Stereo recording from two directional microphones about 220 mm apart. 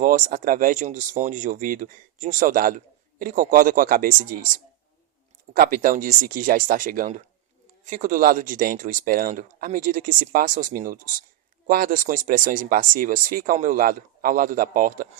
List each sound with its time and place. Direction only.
0.0 s speech: 40° right (ahead or behind)